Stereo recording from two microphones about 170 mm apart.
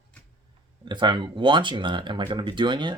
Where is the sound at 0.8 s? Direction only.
25° right (ahead or behind).